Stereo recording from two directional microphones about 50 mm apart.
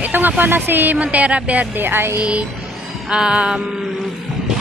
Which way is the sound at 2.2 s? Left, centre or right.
Right.